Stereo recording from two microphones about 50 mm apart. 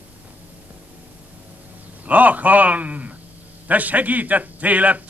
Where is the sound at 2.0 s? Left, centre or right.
Right.